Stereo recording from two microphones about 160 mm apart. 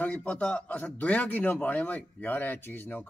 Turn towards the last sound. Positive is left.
turn(degrees=10)  # may be behind; listen again after turning